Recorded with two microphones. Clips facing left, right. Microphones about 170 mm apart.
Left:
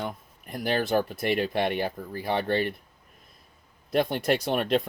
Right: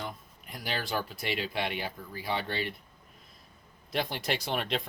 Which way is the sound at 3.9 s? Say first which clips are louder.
Left 8 dB; 50° left (ahead or behind).